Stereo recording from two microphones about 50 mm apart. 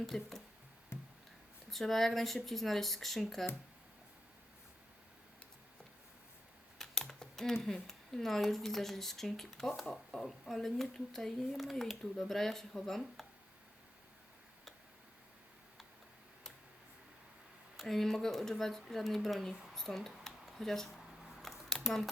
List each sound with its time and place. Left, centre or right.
0.0 s speech: centre
0.9 s a sound: left
1.7 s speech: centre
6.7 s typing: centre
7.6 s speech: centre
17.7 s speech: centre
19.7 s a sound: centre